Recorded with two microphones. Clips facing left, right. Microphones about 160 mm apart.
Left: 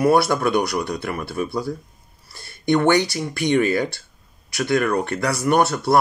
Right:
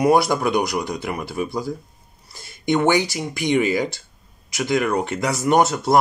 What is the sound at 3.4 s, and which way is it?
Speech, 15° right (ahead or behind).